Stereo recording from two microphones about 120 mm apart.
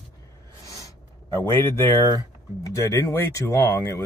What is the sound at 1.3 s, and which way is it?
Speech, 20° left (ahead or behind).